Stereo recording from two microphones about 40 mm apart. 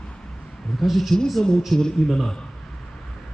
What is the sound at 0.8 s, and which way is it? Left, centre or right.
Speech, centre.